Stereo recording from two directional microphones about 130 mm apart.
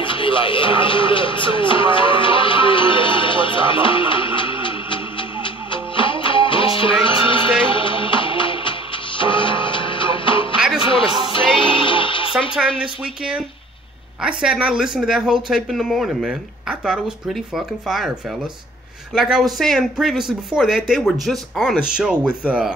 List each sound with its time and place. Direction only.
0.0 s music: 40° left (ahead or behind)
12.5 s speech: 5° right (ahead or behind)
19.1 s speech: 5° right (ahead or behind)